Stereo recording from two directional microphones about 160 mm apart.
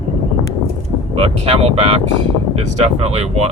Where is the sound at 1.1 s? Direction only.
35° right (ahead or behind).